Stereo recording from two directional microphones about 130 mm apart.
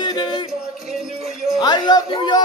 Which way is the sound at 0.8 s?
60° right (ahead or behind).